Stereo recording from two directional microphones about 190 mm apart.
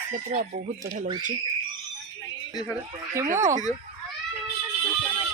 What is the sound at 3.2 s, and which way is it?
Speech, 15° right (ahead or behind).